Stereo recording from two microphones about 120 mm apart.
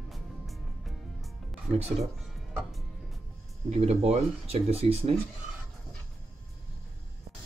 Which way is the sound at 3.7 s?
60° right (ahead or behind).